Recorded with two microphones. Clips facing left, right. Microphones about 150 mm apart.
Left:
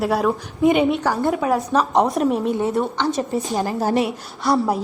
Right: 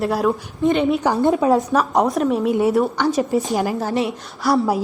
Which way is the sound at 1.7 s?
Centre (ahead or behind).